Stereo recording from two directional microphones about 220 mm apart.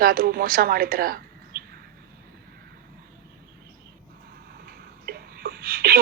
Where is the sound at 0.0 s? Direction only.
40° right (ahead or behind).